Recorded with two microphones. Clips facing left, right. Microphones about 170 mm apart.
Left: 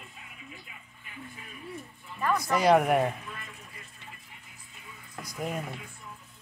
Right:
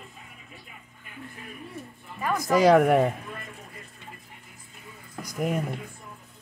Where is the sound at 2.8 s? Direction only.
50° right (ahead or behind).